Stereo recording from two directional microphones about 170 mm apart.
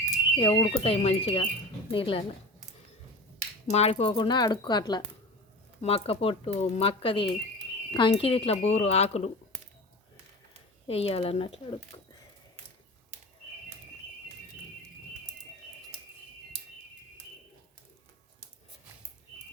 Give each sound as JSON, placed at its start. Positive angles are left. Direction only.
{"t": 0.0, "sound": "speech", "side_deg": 30}
{"t": 3.7, "sound": "speech", "side_deg": 40}
{"t": 5.8, "sound": "speech", "side_deg": 35}
{"t": 10.8, "sound": "speech", "side_deg": 35}